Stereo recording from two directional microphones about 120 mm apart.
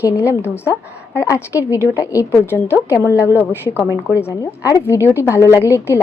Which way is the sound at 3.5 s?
20° left (ahead or behind).